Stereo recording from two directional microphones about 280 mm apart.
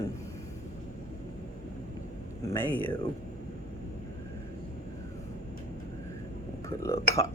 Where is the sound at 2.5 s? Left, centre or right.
Centre.